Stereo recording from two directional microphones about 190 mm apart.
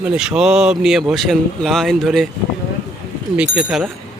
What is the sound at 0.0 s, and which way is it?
Speech, 5° right (ahead or behind).